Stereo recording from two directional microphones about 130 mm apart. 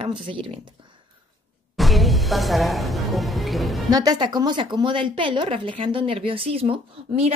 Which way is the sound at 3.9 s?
30° right (ahead or behind).